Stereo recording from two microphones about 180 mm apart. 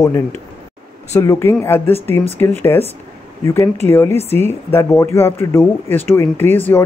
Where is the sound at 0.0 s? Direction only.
15° left (ahead or behind).